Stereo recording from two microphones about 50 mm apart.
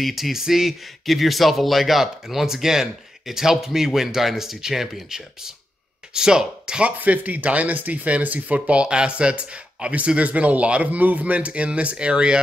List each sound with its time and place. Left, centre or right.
0.0 s speech: centre
7.0 s speech: right; by 12.4 s centre